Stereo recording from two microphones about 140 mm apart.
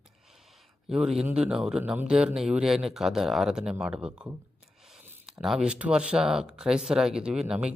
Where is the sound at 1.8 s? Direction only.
10° right (ahead or behind).